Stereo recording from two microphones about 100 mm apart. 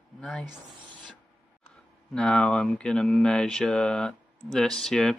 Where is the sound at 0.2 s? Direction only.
5° left (ahead or behind).